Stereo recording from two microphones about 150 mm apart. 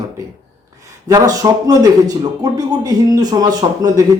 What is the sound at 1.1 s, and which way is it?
Speech, 25° right (ahead or behind).